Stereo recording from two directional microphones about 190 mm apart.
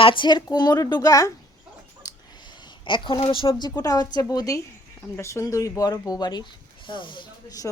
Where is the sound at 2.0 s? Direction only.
20° left (ahead or behind).